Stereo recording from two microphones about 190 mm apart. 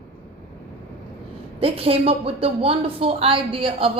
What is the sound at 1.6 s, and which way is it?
Speech, 30° right (ahead or behind).